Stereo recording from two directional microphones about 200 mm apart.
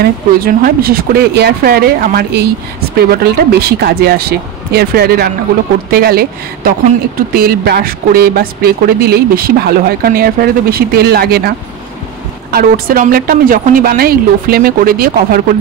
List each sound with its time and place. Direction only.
0.0 s speech: 45° right (ahead or behind)
12.5 s speech: 45° right (ahead or behind)